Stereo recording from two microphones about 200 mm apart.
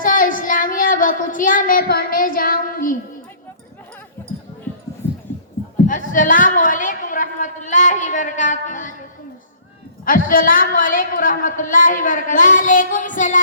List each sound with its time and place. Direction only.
0.0 s child singing: 45° left (ahead or behind)
5.7 s a sound: 40° left (ahead or behind)
10.1 s a woman's voice: 45° left (ahead or behind)